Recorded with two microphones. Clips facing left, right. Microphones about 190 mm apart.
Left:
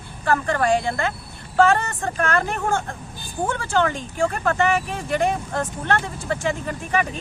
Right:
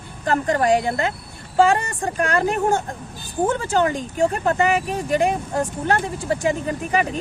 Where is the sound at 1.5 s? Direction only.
15° right (ahead or behind).